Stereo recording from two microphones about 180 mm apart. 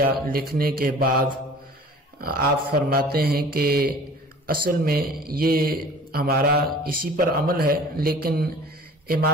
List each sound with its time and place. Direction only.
0.0 s speech: 55° right (ahead or behind)
2.2 s a man's voice: 55° right (ahead or behind)